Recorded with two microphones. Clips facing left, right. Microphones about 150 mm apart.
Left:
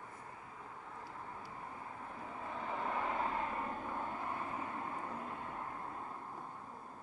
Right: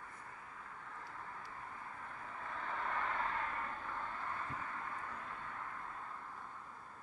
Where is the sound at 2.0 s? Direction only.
20° left (ahead or behind).